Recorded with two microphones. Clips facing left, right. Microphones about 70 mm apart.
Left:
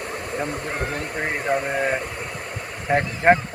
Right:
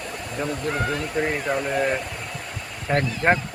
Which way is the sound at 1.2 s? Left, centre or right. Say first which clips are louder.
Left 1 dB; left.